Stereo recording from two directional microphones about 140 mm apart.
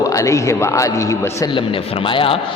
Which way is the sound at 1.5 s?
40° left (ahead or behind).